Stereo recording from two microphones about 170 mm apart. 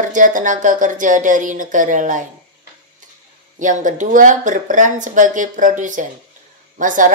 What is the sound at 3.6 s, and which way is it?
A woman's voice, 50° right (ahead or behind).